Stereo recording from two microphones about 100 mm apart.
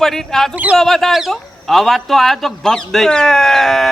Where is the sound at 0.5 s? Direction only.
15° right (ahead or behind).